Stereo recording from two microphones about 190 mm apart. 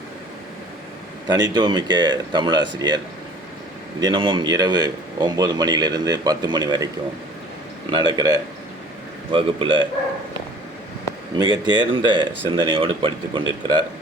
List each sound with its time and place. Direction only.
1.3 s a man's voice: 20° right (ahead or behind)
4.0 s a man's voice: 25° right (ahead or behind)
11.6 s a man's voice: 20° right (ahead or behind)